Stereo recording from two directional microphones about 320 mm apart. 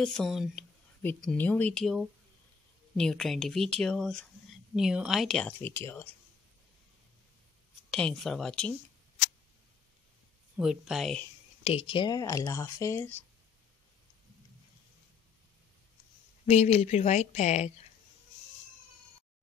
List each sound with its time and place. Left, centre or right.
0.0 s speech: centre
7.9 s speech: centre
10.6 s speech: centre
11.6 s speech: centre
16.4 s speech: left